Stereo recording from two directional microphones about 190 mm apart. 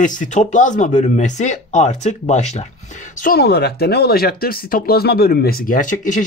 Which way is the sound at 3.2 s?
50° left (ahead or behind).